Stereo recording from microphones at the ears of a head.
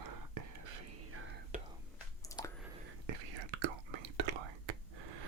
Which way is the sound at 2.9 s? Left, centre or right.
Right.